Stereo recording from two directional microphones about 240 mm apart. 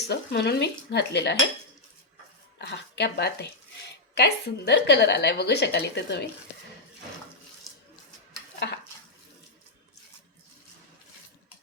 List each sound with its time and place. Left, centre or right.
0.1 s a woman's voice: left
2.6 s a woman's voice: left
8.5 s dishes: left